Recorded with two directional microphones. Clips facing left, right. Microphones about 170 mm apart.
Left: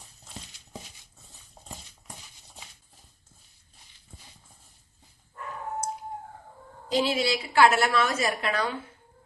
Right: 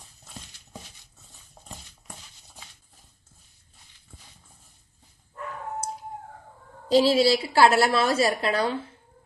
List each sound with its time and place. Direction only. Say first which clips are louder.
6.8 s a woman's voice: right 7 dB; 35° right (ahead or behind)